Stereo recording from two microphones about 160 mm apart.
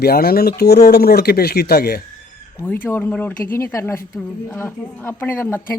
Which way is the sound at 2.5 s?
10° left (ahead or behind).